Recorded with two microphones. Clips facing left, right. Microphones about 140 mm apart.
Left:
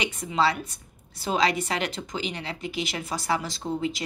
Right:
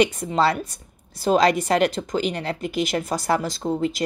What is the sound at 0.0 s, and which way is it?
A woman's voice, 40° right (ahead or behind).